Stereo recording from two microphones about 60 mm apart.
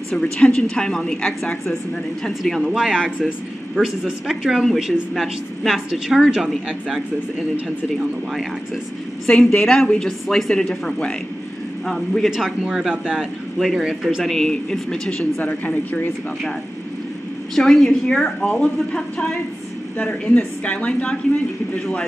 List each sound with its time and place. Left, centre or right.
0.1 s a woman's voice: centre
2.6 s speech: centre
9.3 s a woman's voice: centre
12.3 s speech: centre
15.3 s a woman's voice: left
17.6 s a woman's voice: centre
20.0 s a woman's voice: left